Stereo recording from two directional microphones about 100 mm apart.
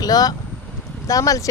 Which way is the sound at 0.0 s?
40° left (ahead or behind).